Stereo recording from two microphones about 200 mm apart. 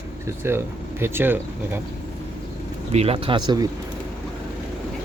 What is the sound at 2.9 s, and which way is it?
Speech, 30° right (ahead or behind).